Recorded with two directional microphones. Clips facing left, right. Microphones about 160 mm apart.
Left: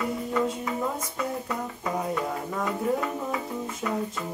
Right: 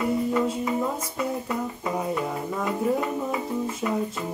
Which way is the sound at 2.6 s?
20° right (ahead or behind).